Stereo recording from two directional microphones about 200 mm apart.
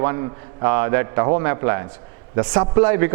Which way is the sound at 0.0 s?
15° right (ahead or behind).